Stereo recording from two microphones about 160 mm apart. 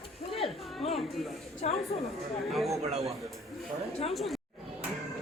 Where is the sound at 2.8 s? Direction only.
40° right (ahead or behind).